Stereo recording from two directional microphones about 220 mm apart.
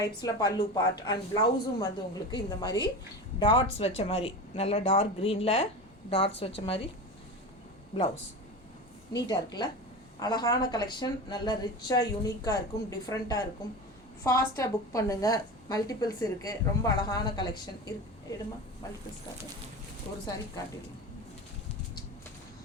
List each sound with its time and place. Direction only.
0.0 s a woman's voice: 15° left (ahead or behind)
9.1 s a woman's voice: 20° left (ahead or behind)